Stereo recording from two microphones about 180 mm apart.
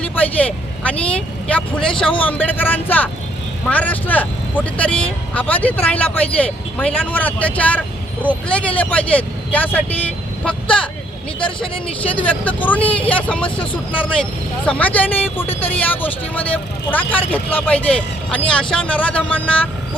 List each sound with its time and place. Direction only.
0.0 s vehicle: 10° left (ahead or behind)
1.5 s speech: 5° left (ahead or behind)
11.3 s speech: 30° left (ahead or behind)
12.1 s speech: 10° left (ahead or behind)